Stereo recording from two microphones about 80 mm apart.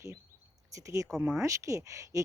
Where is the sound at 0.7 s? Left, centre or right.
Right.